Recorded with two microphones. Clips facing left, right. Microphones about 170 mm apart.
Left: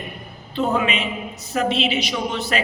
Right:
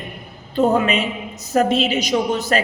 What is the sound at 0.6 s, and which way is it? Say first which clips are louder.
A man's voice: right 5 dB; 40° right (ahead or behind).